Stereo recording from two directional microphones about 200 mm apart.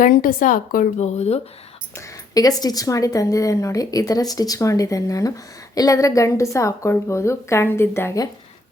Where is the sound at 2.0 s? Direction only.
20° left (ahead or behind).